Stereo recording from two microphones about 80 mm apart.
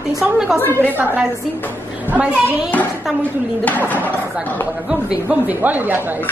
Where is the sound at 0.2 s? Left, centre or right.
Centre.